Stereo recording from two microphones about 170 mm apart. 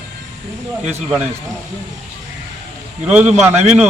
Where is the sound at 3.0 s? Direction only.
10° right (ahead or behind).